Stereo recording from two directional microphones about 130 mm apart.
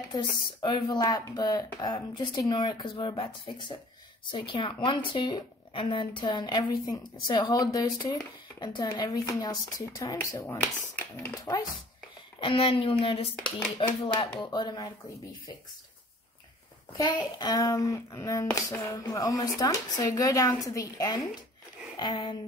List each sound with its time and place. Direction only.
0.1 s a woman's voice: 35° left (ahead or behind)
10.3 s speech: 20° left (ahead or behind)
12.4 s a woman's voice: 45° left (ahead or behind)
16.9 s a woman's voice: 30° left (ahead or behind)